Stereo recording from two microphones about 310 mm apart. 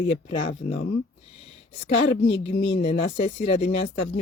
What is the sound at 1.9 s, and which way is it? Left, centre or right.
Speech, left.